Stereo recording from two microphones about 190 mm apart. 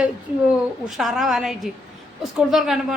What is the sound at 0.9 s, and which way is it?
Speech, centre (ahead or behind).